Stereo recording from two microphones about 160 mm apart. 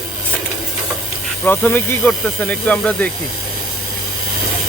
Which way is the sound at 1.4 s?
10° left (ahead or behind).